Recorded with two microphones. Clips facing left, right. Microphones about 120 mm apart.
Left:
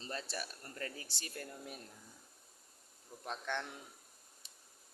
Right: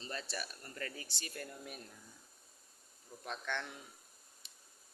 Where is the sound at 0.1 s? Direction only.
25° left (ahead or behind).